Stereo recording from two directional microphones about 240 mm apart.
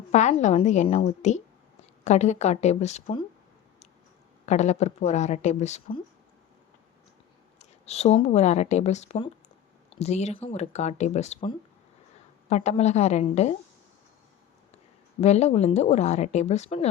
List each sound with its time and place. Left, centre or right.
0.1 s speech: left
4.4 s speech: left
7.6 s speech: left
15.2 s speech: left